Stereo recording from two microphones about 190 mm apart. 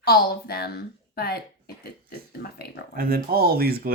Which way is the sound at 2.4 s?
55° left (ahead or behind).